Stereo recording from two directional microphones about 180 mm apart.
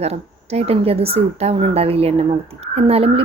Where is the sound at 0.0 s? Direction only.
35° right (ahead or behind).